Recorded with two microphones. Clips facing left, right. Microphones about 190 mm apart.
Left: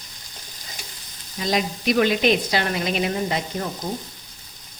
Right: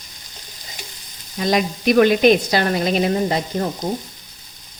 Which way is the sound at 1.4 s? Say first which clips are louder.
Right 4 dB; 55° right (ahead or behind).